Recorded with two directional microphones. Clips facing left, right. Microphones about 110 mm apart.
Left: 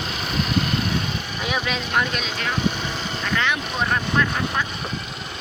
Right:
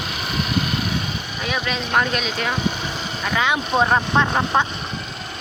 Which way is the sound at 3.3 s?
20° right (ahead or behind).